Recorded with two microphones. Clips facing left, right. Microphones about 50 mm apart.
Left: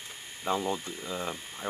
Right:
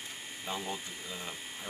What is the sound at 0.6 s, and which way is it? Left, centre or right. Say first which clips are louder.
Speech: left 6 dB; left.